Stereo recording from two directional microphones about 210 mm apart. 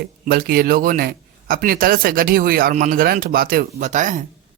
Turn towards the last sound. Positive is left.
turn(degrees=-35)  # may be behind; listen again after turning